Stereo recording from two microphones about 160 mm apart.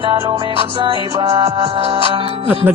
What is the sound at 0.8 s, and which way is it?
Music, 35° right (ahead or behind).